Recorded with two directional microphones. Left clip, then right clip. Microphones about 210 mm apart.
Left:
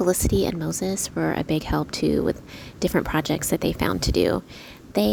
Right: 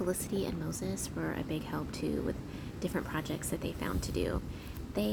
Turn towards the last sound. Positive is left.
turn(degrees=45)  # may be behind; listen again after turning